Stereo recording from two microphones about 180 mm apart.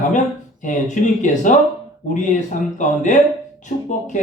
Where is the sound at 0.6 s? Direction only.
45° left (ahead or behind).